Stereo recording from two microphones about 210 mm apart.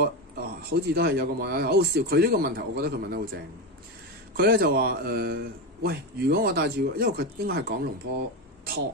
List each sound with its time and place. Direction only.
0.0 s a man's voice: 45° right (ahead or behind)
4.3 s a man's voice: 45° right (ahead or behind)